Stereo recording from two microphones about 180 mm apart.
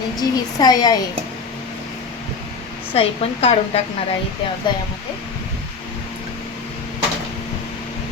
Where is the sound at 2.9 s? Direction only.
35° left (ahead or behind).